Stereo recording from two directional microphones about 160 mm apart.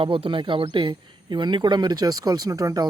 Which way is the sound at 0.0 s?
35° right (ahead or behind).